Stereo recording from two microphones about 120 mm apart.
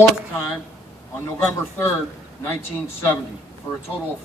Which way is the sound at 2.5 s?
15° left (ahead or behind).